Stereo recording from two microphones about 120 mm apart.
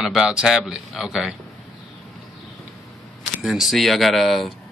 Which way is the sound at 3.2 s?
Centre (ahead or behind).